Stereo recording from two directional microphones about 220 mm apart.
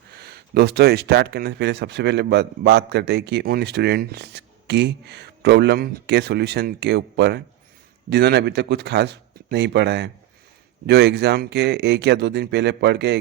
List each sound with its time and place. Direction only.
0.2 s speech: 45° right (ahead or behind)